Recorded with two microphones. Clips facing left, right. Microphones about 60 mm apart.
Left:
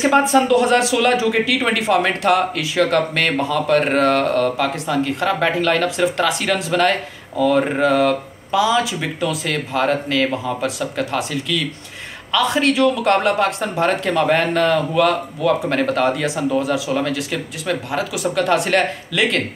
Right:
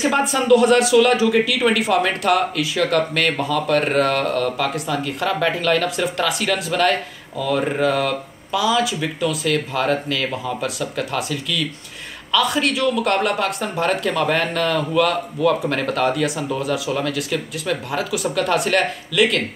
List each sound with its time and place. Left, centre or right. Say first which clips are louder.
0.1 s speech: left 1 dB; left
4.8 s speech: left 3 dB; centre
6.9 s speech: even; left